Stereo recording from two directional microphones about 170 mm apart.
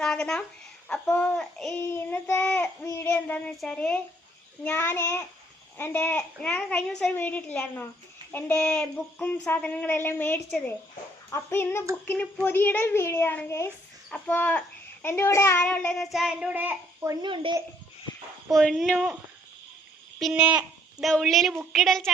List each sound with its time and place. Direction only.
0.0 s a sound: 5° left (ahead or behind)
0.9 s a child's voice: 5° left (ahead or behind); by 17.2 s 15° right (ahead or behind)
17.2 s a child's voice: 30° right (ahead or behind)
18.4 s speech: centre (ahead or behind)
20.1 s a child's voice: 5° right (ahead or behind)